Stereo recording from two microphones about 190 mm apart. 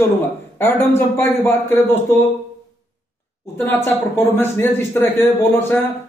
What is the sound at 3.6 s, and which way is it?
A man's voice, 10° left (ahead or behind).